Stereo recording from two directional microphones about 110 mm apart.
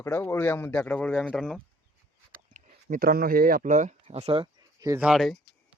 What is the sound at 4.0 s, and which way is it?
Speech, 65° right (ahead or behind).